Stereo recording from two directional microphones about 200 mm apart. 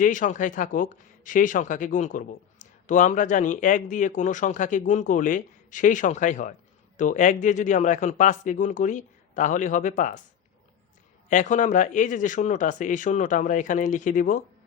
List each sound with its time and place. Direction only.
0.0 s speech: 40° left (ahead or behind)
11.3 s speech: 40° left (ahead or behind)